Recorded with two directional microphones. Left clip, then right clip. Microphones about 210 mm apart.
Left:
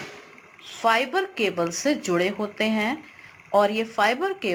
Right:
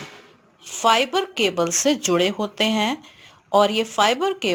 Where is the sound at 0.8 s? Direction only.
40° right (ahead or behind).